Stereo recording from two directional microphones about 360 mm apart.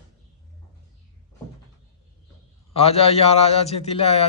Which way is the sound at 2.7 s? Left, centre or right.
Centre.